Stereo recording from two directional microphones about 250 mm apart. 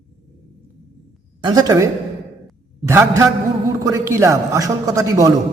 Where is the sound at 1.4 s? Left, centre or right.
Centre.